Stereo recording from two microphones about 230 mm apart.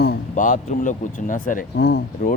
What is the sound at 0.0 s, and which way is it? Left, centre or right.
Speech, left.